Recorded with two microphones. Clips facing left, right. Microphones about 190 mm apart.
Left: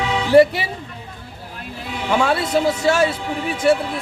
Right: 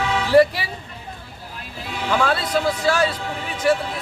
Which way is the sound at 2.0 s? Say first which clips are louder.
Left 2 dB; 20° left (ahead or behind).